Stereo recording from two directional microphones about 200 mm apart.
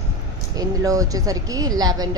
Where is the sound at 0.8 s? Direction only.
15° right (ahead or behind).